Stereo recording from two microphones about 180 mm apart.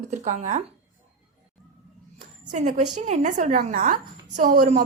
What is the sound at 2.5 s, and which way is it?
A woman's voice, 40° right (ahead or behind).